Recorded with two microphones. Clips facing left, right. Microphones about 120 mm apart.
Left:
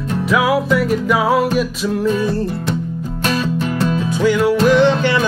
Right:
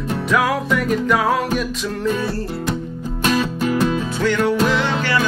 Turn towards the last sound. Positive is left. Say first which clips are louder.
# left 7 dB
turn(degrees=20)  # may be behind; listen again after turning